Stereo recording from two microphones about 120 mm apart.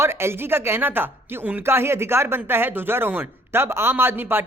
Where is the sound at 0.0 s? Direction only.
20° right (ahead or behind).